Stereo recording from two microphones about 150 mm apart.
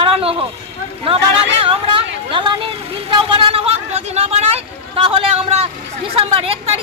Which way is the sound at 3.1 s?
35° right (ahead or behind).